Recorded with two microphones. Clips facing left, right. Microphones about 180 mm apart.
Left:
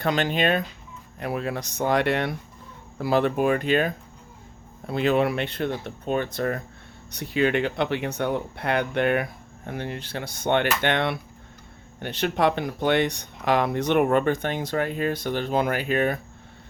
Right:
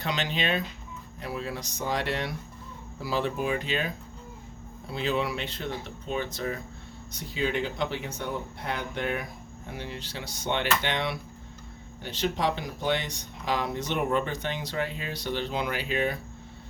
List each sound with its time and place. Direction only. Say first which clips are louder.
0.0 s speech: left 7 dB; 50° left (ahead or behind)
9.6 s speech: left 6 dB; 55° left (ahead or behind)